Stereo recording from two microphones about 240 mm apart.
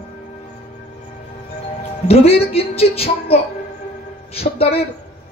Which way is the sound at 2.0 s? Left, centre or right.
Left.